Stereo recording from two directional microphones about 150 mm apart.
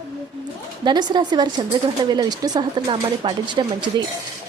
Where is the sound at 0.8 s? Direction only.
30° right (ahead or behind).